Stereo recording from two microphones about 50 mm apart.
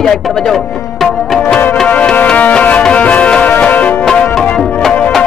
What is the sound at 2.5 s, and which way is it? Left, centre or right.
Music, left.